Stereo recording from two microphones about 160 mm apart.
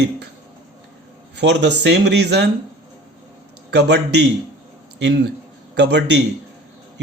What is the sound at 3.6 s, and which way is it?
Speech, 90° right.